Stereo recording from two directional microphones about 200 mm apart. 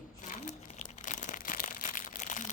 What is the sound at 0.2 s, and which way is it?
Crumpling, 40° left (ahead or behind).